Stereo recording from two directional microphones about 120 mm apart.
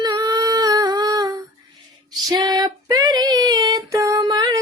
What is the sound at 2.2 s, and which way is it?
Female singing, 35° right (ahead or behind).